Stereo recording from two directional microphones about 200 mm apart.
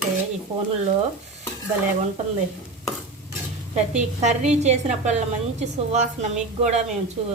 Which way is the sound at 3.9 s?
35° right (ahead or behind).